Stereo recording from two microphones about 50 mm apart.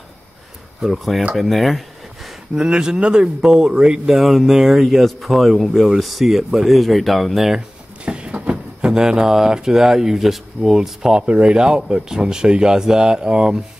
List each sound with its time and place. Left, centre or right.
0.9 s speech: centre
2.5 s speech: centre
4.0 s speech: centre
7.5 s a sound: right
8.4 s speech: centre